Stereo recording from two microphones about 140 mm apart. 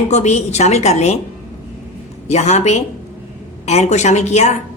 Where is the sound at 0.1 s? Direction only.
55° left (ahead or behind).